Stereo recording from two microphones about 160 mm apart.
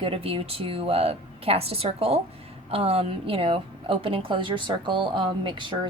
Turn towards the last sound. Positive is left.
turn(degrees=-30)  # may be behind; listen again after turning